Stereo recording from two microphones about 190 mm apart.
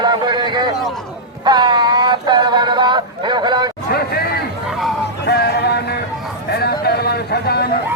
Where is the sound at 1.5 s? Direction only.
25° right (ahead or behind).